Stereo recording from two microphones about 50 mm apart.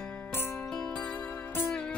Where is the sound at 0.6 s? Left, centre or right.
Centre.